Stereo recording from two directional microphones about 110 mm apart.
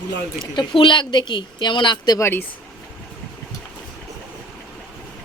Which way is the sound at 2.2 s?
20° left (ahead or behind).